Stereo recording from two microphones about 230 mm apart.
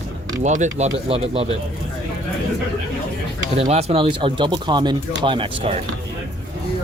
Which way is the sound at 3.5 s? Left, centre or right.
Right.